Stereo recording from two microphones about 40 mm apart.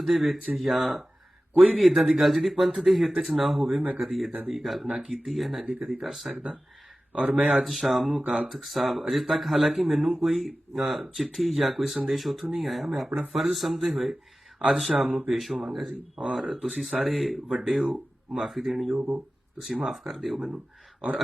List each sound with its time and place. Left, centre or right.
0.0 s speech: centre
1.5 s speech: centre
7.1 s speech: right
7.4 s speech: centre
15.0 s speech: centre
15.3 s speech: centre